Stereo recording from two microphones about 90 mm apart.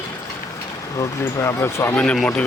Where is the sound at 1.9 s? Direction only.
15° left (ahead or behind).